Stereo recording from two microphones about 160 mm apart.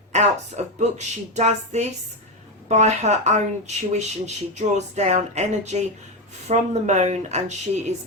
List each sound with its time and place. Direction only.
0.1 s a woman's voice: 45° right (ahead or behind)